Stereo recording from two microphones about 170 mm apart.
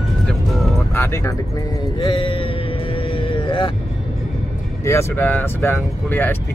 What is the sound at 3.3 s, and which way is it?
Vehicle, 30° left (ahead or behind).